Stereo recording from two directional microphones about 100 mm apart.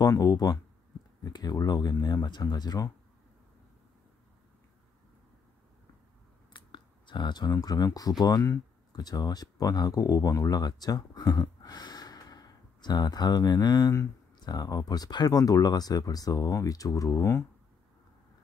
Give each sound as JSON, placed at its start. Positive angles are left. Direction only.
{"t": 0.0, "sound": "speech", "side_deg": 35}
{"t": 6.5, "sound": "clicking", "side_deg": 50}
{"t": 8.2, "sound": "speech", "side_deg": 40}
{"t": 11.6, "sound": "sigh", "side_deg": 40}
{"t": 14.4, "sound": "speech", "side_deg": 40}